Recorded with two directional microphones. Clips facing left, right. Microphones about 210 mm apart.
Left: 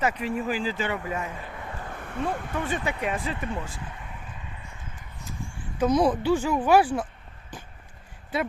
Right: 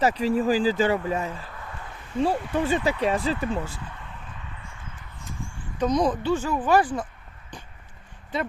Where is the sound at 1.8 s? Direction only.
55° left (ahead or behind).